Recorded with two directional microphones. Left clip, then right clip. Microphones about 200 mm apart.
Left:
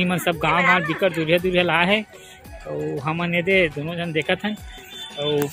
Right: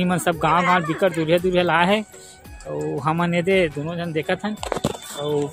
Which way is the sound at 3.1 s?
20° right (ahead or behind).